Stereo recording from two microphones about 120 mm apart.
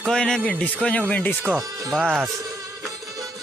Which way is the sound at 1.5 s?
30° right (ahead or behind).